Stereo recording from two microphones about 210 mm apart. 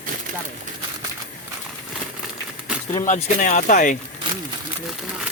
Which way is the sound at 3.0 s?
35° left (ahead or behind).